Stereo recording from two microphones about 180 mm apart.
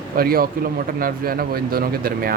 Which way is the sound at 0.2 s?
55° right (ahead or behind).